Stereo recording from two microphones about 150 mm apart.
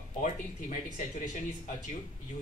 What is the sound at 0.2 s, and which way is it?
Speech, 55° left (ahead or behind).